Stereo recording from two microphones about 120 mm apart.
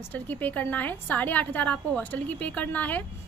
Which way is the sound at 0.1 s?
15° left (ahead or behind).